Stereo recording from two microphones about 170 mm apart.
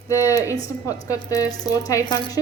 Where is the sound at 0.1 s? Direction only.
20° left (ahead or behind).